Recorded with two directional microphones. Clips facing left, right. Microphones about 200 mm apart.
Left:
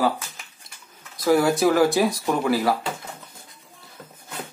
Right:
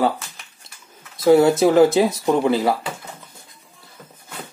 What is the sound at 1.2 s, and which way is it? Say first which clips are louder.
Speech: right 5 dB; 25° right (ahead or behind).